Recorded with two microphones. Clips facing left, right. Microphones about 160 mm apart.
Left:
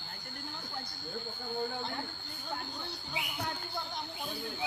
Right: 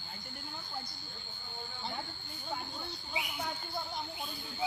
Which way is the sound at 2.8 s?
Centre (ahead or behind).